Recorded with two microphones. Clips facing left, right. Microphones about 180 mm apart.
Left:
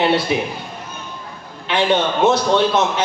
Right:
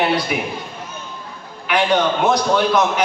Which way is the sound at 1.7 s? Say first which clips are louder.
Right 1 dB; 25° left (ahead or behind).